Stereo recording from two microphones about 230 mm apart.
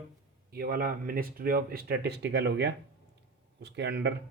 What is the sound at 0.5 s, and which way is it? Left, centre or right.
Speech, right.